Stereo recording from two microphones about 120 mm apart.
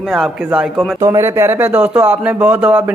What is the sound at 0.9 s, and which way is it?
Speech, 20° right (ahead or behind).